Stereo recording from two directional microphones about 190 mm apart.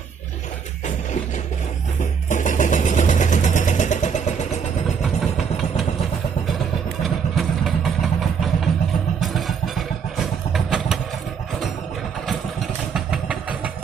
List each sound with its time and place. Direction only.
2.2 s vehicle: 40° left (ahead or behind)
7.0 s vehicle: centre (ahead or behind)
12.3 s vehicle: centre (ahead or behind)